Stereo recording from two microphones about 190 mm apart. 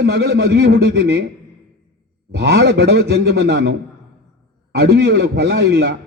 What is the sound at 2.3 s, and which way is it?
A man's voice, 65° right (ahead or behind).